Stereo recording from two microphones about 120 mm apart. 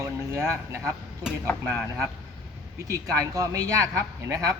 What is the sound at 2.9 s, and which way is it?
Speech, 30° right (ahead or behind).